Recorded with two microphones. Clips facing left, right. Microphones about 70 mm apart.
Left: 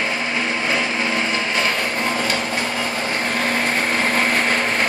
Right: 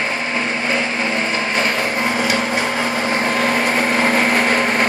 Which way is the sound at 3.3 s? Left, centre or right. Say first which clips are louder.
Right 3 dB; centre.